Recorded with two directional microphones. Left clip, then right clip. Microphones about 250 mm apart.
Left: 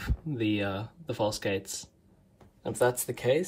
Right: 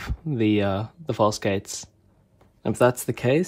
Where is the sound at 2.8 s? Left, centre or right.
Right.